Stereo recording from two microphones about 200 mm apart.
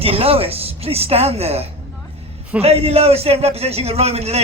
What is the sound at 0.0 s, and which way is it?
A woman's voice, 30° right (ahead or behind).